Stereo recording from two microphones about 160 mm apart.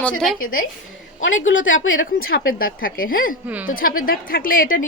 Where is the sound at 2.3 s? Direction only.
65° left (ahead or behind).